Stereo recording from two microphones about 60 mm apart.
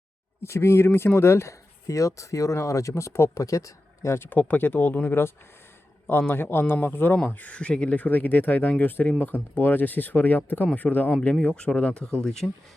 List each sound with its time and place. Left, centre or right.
0.4 s speech: left
4.3 s speech: left
11.2 s speech: centre
12.2 s speech: centre